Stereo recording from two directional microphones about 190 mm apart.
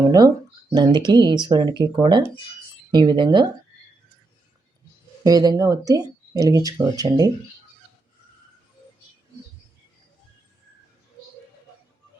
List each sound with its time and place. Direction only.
0.7 s speech: 20° right (ahead or behind)
5.2 s speech: 20° right (ahead or behind)